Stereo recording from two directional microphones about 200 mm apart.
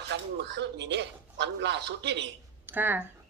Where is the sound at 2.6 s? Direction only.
10° right (ahead or behind).